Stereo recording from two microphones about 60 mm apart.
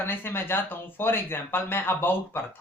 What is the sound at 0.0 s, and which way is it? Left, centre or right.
Speech, left.